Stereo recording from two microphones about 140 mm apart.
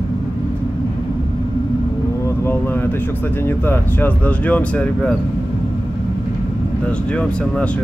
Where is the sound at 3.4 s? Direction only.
15° left (ahead or behind).